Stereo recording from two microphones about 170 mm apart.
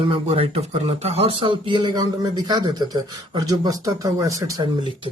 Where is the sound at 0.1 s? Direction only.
35° right (ahead or behind).